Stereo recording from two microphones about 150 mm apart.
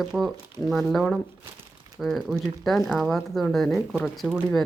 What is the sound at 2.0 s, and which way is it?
A woman's voice, centre (ahead or behind).